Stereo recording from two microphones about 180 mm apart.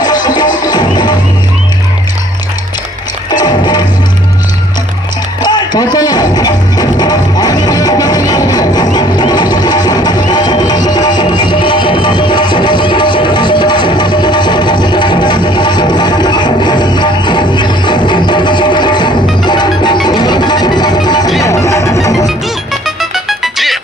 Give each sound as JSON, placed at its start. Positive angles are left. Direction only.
{"t": 0.0, "sound": "music", "side_deg": 20}
{"t": 3.2, "sound": "music", "side_deg": 25}
{"t": 5.4, "sound": "music", "side_deg": 25}
{"t": 22.7, "sound": "music", "side_deg": 0}